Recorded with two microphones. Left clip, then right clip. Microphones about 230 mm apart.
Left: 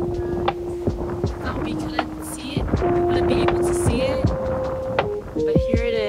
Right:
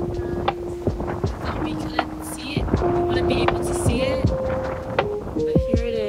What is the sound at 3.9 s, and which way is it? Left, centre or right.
Music, left.